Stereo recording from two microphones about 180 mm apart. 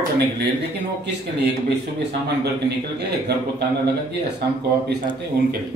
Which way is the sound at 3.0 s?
65° right (ahead or behind).